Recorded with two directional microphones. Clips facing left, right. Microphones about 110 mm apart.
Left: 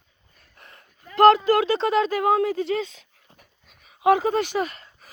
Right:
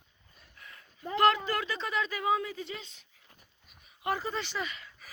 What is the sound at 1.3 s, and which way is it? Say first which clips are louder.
Speech: left 13 dB; 75° left (ahead or behind).